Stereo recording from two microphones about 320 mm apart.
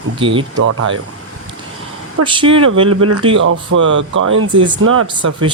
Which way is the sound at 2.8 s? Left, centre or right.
Right.